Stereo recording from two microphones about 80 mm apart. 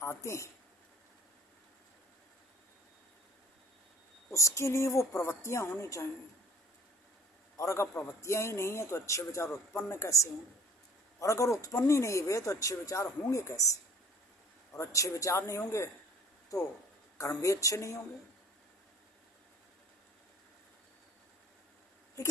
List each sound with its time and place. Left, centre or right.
0.0 s speech: left
4.3 s speech: left
7.5 s a man's voice: left
22.2 s a sound: left